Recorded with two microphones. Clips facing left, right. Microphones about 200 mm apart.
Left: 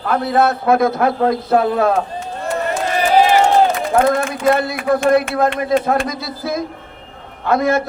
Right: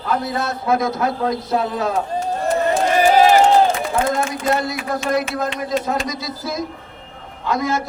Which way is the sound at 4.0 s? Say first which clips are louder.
Left 5 dB; 55° left (ahead or behind).